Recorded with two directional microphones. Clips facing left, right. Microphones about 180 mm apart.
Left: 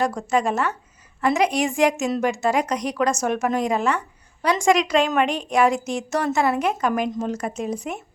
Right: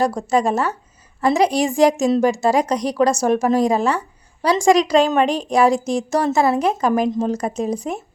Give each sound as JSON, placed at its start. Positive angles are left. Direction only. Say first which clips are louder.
{"t": 0.0, "sound": "a woman's voice", "louder": "right 4 dB", "side_deg": -35}